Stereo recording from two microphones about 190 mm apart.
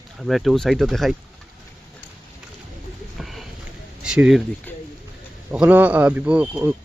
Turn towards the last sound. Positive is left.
turn(degrees=-10)  # may be behind; listen again after turning